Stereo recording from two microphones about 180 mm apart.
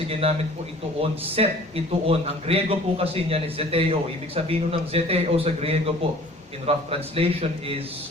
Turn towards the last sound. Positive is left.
turn(degrees=-35)  # may be behind; listen again after turning